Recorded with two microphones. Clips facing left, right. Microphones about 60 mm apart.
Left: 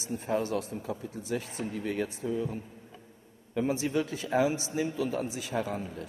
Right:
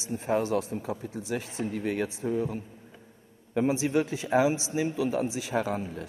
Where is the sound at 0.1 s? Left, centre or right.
Right.